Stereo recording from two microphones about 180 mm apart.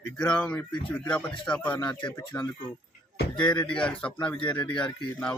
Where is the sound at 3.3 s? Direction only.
5° left (ahead or behind).